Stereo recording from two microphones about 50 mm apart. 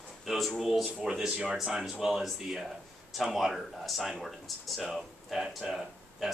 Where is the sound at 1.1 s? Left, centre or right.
Centre.